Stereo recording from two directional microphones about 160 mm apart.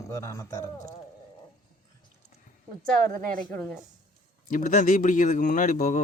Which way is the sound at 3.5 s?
5° left (ahead or behind).